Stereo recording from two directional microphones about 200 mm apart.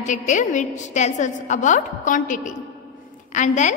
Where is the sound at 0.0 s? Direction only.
40° left (ahead or behind).